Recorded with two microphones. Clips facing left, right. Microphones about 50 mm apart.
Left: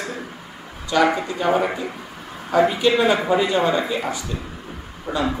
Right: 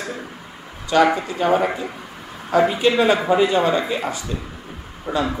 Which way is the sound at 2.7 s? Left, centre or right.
Centre.